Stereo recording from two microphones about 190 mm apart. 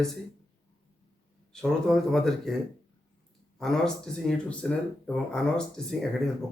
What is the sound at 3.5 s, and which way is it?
Speech, centre (ahead or behind).